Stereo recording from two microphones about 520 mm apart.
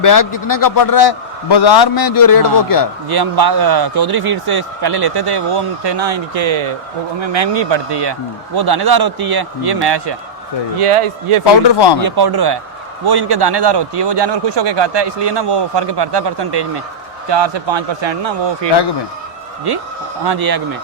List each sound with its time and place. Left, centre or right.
0.0 s a man's voice: left
3.1 s a man's voice: right
10.8 s speech: right
11.7 s speech: left
12.0 s a man's voice: right
20.2 s a man's voice: right